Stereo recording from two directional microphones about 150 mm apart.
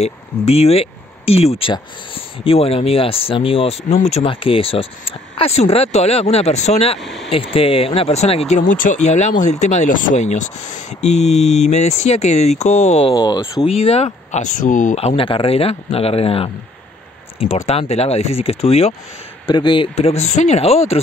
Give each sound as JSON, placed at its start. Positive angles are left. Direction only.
{"t": 0.0, "sound": "speech", "side_deg": 45}
{"t": 7.0, "sound": "speech", "side_deg": 0}
{"t": 7.2, "sound": "speech", "side_deg": 40}
{"t": 8.5, "sound": "speech", "side_deg": 60}
{"t": 13.1, "sound": "speech", "side_deg": 30}
{"t": 13.7, "sound": "speech", "side_deg": 40}
{"t": 17.6, "sound": "speech", "side_deg": 45}
{"t": 19.4, "sound": "speech", "side_deg": 30}